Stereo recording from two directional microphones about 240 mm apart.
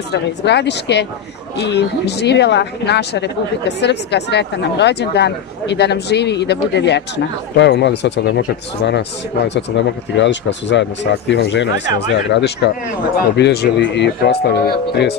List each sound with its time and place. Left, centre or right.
0.1 s a woman's voice: left